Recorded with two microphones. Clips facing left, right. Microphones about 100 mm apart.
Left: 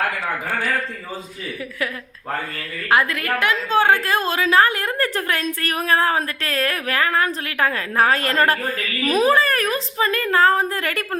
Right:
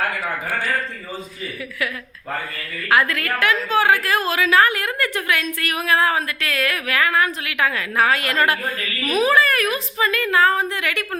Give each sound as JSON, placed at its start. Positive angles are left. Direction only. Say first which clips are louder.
{"t": 2.9, "sound": "a woman's voice", "louder": "even", "side_deg": 20}